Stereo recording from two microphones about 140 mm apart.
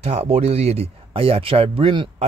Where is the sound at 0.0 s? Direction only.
45° right (ahead or behind).